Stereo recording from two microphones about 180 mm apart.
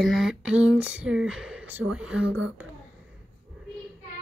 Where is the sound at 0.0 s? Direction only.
Centre (ahead or behind).